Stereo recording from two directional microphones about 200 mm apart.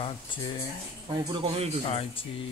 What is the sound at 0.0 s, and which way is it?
Speech, 25° left (ahead or behind).